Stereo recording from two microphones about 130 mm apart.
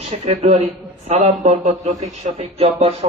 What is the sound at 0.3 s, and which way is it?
Speech, 65° right (ahead or behind).